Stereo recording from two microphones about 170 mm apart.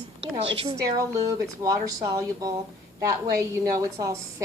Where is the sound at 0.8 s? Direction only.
20° right (ahead or behind).